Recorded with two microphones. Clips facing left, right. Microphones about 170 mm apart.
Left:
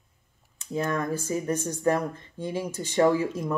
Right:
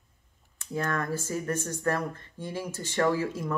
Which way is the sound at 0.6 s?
20° left (ahead or behind).